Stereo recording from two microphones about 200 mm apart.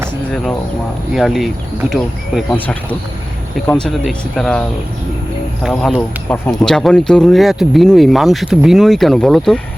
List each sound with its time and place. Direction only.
1.1 s speech: centre (ahead or behind)
2.5 s speech: 10° left (ahead or behind)
5.6 s speech: centre (ahead or behind)